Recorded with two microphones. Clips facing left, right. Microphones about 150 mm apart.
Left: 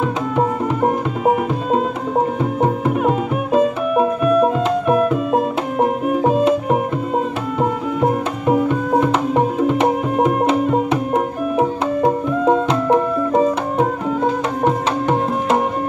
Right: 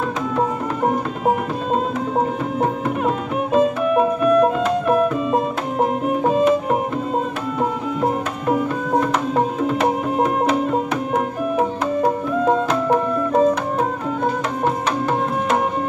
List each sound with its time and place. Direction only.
0.4 s music: 5° left (ahead or behind)
8.9 s music: 10° left (ahead or behind)
10.9 s music: 25° left (ahead or behind)